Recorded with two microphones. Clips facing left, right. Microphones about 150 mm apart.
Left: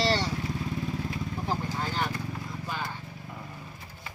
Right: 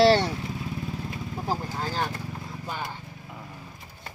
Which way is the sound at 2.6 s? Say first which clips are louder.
Right 1 dB; 20° right (ahead or behind).